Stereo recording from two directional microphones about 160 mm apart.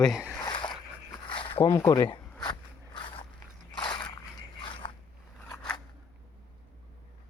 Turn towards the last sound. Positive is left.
turn(degrees=5)  # may be behind; listen again after turning